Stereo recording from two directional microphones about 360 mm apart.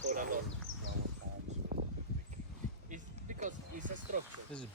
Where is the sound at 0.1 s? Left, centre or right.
Right.